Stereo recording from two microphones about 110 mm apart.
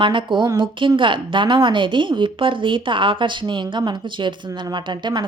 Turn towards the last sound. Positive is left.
turn(degrees=-45)  # may be behind; listen again after turning